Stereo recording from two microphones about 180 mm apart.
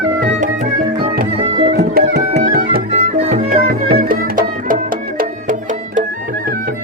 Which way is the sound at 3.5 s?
55° right (ahead or behind).